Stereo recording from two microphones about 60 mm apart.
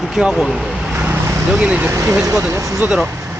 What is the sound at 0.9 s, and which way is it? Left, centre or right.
Vehicle, right.